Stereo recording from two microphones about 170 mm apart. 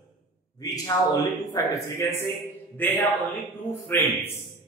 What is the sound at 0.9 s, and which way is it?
A man's voice, 25° left (ahead or behind).